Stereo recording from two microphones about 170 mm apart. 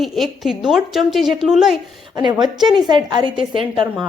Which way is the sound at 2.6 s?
25° right (ahead or behind).